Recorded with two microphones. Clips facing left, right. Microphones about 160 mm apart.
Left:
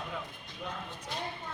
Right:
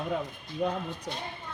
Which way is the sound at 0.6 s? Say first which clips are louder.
Right 12 dB; 45° right (ahead or behind).